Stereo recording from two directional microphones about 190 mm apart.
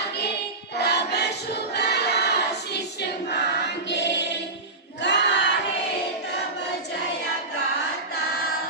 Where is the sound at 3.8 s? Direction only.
65° left (ahead or behind).